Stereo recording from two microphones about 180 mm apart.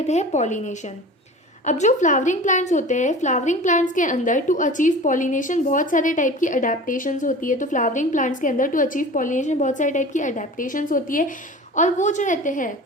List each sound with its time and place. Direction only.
0.1 s a woman's voice: 40° left (ahead or behind)